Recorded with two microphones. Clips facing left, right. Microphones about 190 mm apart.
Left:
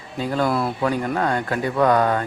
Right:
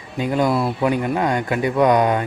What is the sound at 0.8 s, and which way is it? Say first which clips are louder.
Speech: right 2 dB; 15° right (ahead or behind).